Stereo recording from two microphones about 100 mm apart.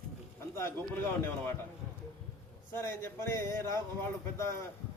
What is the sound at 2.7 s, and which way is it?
Speech, 25° left (ahead or behind).